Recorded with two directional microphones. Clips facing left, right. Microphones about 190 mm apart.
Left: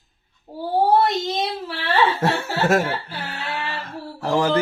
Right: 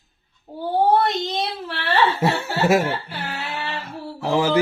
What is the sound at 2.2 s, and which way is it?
Speech, 10° right (ahead or behind).